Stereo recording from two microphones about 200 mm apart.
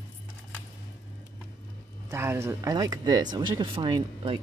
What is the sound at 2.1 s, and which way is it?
Speech, 10° right (ahead or behind).